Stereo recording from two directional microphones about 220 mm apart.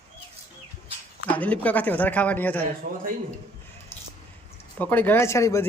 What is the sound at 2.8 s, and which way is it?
Speech, 40° right (ahead or behind).